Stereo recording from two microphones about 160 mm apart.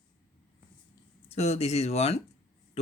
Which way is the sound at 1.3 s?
40° left (ahead or behind).